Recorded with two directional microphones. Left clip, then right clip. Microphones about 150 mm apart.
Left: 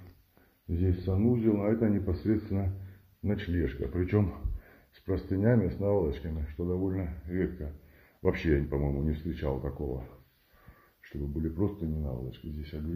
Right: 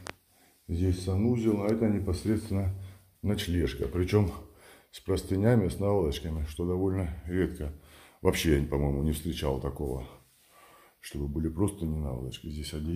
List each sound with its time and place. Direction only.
0.7 s speech: centre (ahead or behind); by 7.5 s 35° right (ahead or behind)
8.2 s speech: 20° right (ahead or behind)
11.0 s speech: 20° right (ahead or behind)